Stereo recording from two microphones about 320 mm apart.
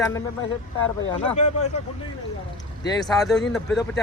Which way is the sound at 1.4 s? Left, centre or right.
Left.